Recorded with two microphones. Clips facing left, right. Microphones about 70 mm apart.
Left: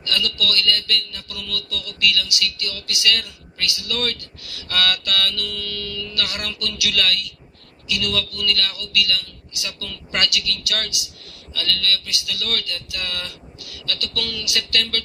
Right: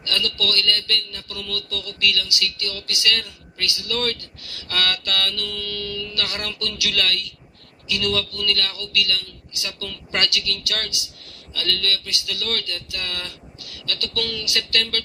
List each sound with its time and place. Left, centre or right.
0.0 s a man's voice: right